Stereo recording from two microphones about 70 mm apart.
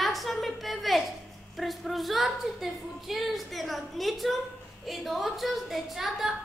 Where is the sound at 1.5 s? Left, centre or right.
Centre.